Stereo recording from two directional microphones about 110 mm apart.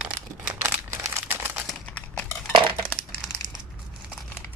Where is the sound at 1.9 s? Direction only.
10° left (ahead or behind).